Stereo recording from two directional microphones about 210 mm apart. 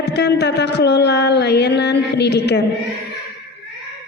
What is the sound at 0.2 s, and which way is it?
A woman's voice, 55° left (ahead or behind).